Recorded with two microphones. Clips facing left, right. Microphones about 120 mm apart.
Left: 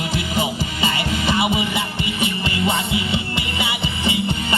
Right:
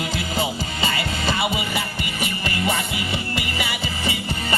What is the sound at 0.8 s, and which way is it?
Music, 25° left (ahead or behind).